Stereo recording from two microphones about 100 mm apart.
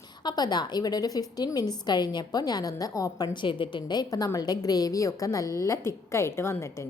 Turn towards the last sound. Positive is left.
turn(degrees=25)  # may be behind; listen again after turning